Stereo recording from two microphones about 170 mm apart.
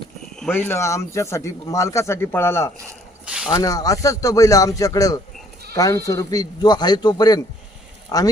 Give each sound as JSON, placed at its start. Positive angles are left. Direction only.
{"t": 0.3, "sound": "speech", "side_deg": 10}
{"t": 3.2, "sound": "a sound", "side_deg": -5}
{"t": 3.5, "sound": "speech", "side_deg": 20}